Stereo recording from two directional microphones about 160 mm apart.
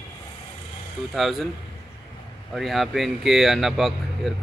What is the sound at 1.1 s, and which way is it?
Speech, centre (ahead or behind).